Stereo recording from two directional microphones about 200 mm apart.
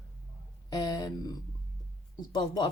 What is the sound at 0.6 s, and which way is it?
Speech, 20° left (ahead or behind).